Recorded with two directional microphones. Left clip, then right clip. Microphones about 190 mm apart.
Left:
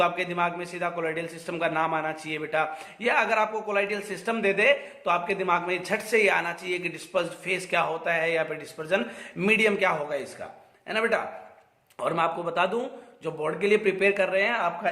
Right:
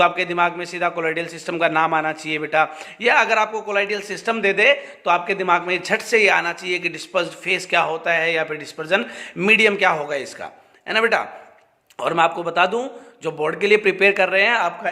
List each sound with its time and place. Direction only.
0.0 s a man's voice: 20° right (ahead or behind)